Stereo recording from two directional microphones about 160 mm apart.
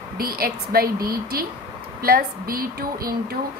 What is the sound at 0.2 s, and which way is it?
A woman's voice, 70° right (ahead or behind).